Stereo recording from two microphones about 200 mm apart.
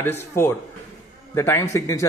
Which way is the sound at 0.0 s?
10° left (ahead or behind).